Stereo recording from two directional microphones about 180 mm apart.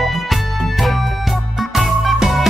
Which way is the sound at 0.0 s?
Centre (ahead or behind).